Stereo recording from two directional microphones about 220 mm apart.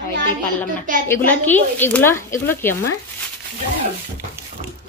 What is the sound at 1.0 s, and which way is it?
Speech, 10° left (ahead or behind).